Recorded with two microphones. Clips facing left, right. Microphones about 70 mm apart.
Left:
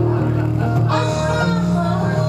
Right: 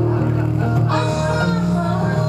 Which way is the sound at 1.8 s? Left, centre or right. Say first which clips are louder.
Left 1 dB; right.